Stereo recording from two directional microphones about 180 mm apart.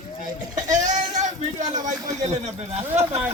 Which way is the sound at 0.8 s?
45° right (ahead or behind).